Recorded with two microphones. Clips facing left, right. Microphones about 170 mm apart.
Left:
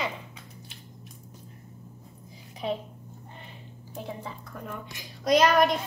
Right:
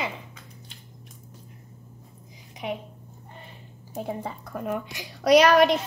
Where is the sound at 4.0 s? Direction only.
50° right (ahead or behind).